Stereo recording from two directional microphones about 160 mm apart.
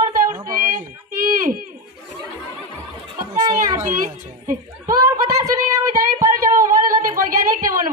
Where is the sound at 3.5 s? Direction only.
55° right (ahead or behind).